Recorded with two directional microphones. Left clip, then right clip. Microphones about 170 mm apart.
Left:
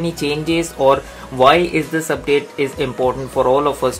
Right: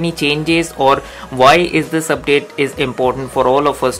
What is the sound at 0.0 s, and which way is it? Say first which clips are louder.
Speech: right 4 dB; 40° right (ahead or behind).